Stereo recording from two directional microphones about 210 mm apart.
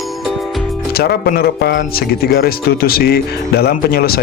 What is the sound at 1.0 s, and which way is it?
Speech, 45° left (ahead or behind).